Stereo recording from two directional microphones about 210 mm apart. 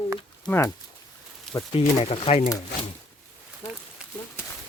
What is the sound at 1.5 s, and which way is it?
Speech, 25° left (ahead or behind).